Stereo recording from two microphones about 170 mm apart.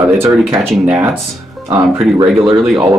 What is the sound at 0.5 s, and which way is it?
Speech, centre (ahead or behind).